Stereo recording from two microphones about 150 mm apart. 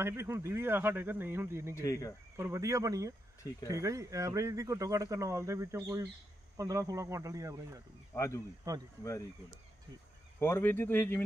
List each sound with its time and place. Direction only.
0.0 s speech: 15° right (ahead or behind)
1.8 s speech: 20° left (ahead or behind)
2.3 s speech: 20° right (ahead or behind)
8.1 s speech: 20° left (ahead or behind)
8.6 s speech: 25° right (ahead or behind)
10.4 s speech: 15° left (ahead or behind)